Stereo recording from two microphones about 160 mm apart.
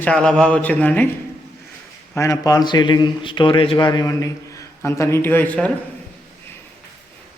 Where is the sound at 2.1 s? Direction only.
20° left (ahead or behind).